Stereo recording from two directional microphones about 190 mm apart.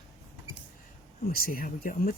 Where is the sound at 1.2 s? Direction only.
50° left (ahead or behind).